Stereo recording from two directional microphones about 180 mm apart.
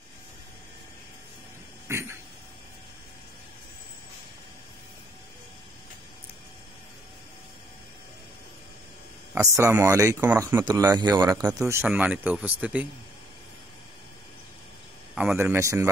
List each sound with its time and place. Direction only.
1.9 s a sound: 15° right (ahead or behind)
9.3 s speech: 15° right (ahead or behind)
15.1 s speech: 5° right (ahead or behind)